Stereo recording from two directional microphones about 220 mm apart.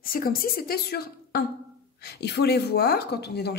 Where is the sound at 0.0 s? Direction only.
40° left (ahead or behind).